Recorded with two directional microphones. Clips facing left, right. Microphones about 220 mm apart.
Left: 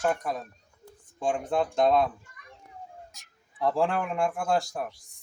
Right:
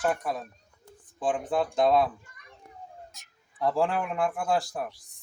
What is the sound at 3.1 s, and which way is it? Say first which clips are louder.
Speech: right 1 dB; centre (ahead or behind).